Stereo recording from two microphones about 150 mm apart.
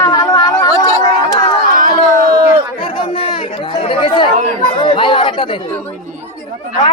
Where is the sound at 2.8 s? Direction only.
40° left (ahead or behind).